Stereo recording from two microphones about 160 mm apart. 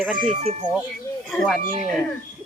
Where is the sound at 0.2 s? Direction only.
45° right (ahead or behind).